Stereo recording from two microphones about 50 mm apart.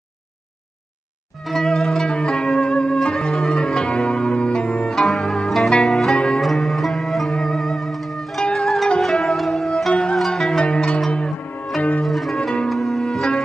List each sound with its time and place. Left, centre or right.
1.5 s zither: centre
6.2 s music: centre
8.5 s zither: centre
9.9 s zither: left
10.2 s zither: centre
12.4 s zither: centre
12.6 s music: centre